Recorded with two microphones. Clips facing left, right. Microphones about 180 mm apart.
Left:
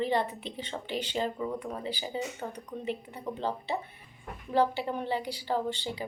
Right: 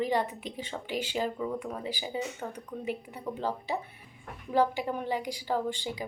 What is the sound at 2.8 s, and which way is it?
Speech, 10° right (ahead or behind).